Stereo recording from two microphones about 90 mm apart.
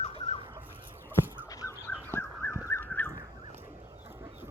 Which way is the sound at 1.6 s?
30° left (ahead or behind).